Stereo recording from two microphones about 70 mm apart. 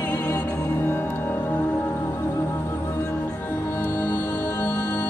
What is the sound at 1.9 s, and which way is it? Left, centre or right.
Music, left.